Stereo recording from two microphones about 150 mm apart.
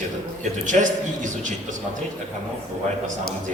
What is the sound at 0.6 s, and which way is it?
Speech, 55° right (ahead or behind).